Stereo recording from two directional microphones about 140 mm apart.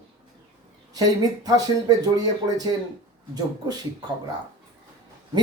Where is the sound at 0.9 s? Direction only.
25° right (ahead or behind).